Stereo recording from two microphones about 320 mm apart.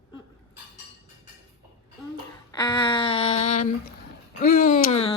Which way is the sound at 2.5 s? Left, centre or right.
Centre.